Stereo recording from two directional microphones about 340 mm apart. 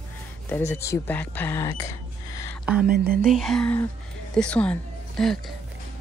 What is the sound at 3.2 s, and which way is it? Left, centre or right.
Speech, centre.